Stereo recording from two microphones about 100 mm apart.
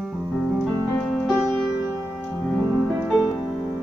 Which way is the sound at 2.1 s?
5° left (ahead or behind).